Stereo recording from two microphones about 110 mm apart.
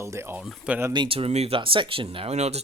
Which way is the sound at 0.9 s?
50° right (ahead or behind).